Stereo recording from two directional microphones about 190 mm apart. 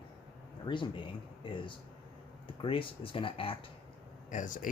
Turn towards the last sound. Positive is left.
turn(degrees=45)  # may be behind; listen again after turning